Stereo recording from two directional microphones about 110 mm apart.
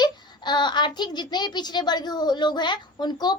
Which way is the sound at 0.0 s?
40° left (ahead or behind).